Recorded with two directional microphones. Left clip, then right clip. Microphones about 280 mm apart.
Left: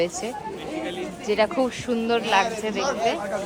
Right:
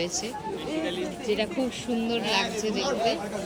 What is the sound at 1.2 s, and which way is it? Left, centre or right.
Speech, centre.